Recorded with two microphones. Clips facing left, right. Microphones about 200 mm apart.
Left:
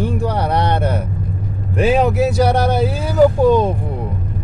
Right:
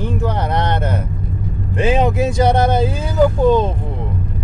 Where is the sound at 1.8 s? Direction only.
20° right (ahead or behind).